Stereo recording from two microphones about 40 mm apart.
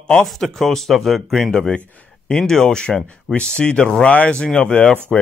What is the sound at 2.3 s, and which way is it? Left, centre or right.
Speech, centre.